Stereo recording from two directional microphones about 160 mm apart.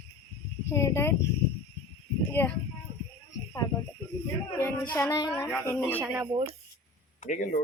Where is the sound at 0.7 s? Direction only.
15° left (ahead or behind).